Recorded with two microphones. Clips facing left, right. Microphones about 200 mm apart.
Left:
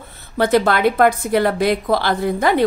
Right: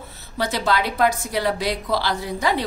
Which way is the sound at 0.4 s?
55° left (ahead or behind).